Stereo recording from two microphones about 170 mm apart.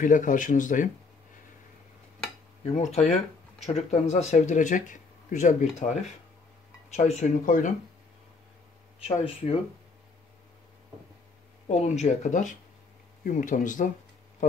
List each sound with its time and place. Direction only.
0.0 s speech: 50° left (ahead or behind)
2.6 s speech: 40° left (ahead or behind)
9.2 s speech: 30° left (ahead or behind)
11.6 s speech: 40° left (ahead or behind)